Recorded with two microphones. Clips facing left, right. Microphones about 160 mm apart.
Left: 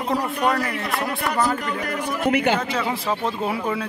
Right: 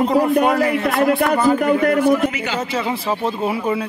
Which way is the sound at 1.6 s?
55° right (ahead or behind).